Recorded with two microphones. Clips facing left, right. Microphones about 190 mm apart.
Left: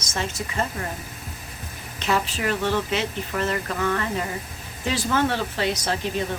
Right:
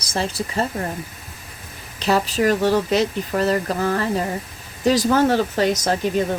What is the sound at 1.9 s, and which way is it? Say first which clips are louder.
Speech: right 6 dB; 35° right (ahead or behind).